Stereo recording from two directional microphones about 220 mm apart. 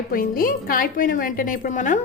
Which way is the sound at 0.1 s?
40° left (ahead or behind).